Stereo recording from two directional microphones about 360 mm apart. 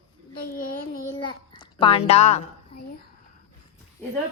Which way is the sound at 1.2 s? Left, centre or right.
Centre.